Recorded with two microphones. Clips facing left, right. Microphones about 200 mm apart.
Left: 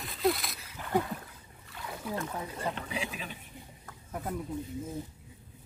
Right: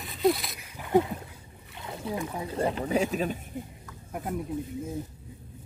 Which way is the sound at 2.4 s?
35° right (ahead or behind).